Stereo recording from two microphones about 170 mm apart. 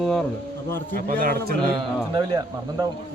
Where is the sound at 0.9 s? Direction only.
60° right (ahead or behind).